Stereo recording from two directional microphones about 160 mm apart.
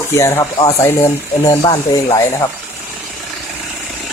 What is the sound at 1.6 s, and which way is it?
Speech, 30° left (ahead or behind).